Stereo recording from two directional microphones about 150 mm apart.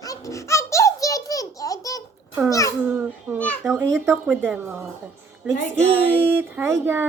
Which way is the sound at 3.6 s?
20° right (ahead or behind).